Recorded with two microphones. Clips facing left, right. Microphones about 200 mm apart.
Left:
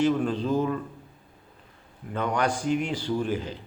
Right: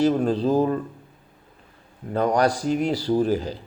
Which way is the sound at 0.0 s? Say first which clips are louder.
Right 4 dB; 35° right (ahead or behind).